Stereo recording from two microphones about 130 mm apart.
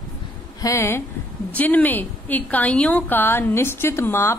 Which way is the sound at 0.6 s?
20° left (ahead or behind).